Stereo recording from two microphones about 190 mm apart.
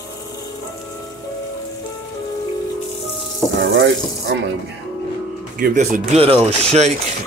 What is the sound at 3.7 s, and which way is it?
Speech, 65° right (ahead or behind).